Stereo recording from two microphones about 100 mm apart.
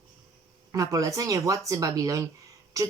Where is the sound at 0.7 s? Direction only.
35° right (ahead or behind).